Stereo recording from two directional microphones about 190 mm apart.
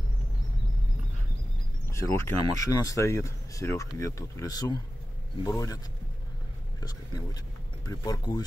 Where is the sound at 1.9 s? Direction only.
15° left (ahead or behind).